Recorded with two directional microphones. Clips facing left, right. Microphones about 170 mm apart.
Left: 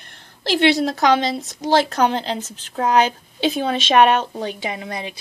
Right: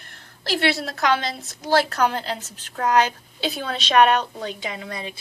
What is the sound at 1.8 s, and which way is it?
A woman's voice, 25° left (ahead or behind).